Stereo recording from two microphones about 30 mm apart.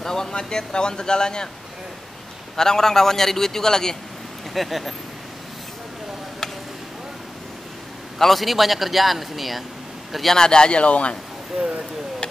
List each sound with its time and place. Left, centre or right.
0.0 s speech: centre
2.5 s a man's voice: centre
4.6 s a man's voice: centre
8.2 s a man's voice: centre
10.3 s speech: left
10.8 s speech: left